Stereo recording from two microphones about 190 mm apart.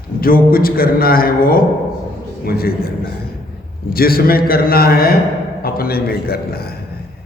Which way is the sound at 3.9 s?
50° left (ahead or behind).